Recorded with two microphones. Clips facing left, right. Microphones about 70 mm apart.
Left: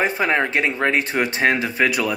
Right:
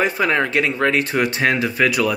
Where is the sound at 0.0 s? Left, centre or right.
Left.